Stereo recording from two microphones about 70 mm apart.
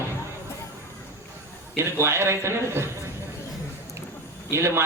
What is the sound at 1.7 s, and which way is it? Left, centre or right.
A man's voice, right.